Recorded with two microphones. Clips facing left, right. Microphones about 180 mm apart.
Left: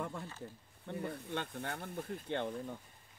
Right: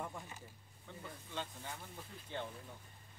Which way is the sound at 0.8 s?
60° left (ahead or behind).